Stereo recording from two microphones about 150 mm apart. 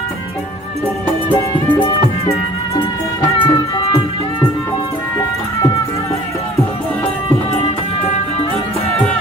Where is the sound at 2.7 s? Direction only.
35° left (ahead or behind).